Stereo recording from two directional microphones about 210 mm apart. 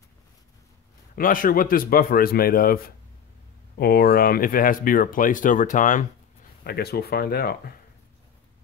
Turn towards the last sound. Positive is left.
turn(degrees=45)  # may be behind; listen again after turning